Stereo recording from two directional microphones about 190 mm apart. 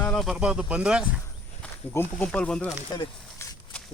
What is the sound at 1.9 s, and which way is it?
Speech, 10° left (ahead or behind).